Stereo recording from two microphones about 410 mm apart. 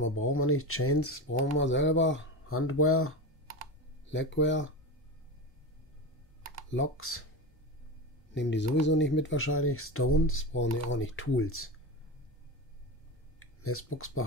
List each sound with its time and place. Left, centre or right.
0.0 s speech: left
6.7 s speech: left
8.4 s speech: left
13.4 s speech: left